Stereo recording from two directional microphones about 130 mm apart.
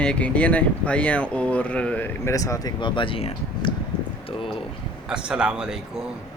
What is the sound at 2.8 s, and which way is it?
Speech, 40° left (ahead or behind).